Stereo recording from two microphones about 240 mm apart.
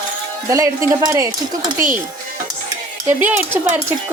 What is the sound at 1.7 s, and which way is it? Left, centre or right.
Speech, right.